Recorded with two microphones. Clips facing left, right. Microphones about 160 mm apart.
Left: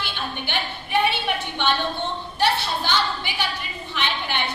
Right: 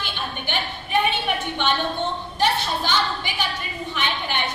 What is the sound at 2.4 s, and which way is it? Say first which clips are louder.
A woman's voice: even; 15° right (ahead or behind).